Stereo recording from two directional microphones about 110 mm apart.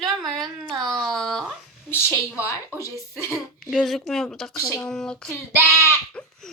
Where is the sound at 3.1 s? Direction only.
25° left (ahead or behind).